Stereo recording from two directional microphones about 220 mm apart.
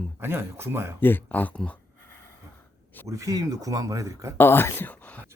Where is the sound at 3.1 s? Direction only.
15° right (ahead or behind).